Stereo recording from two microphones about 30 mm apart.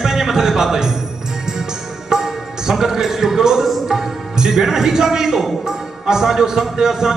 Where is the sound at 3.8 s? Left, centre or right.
Centre.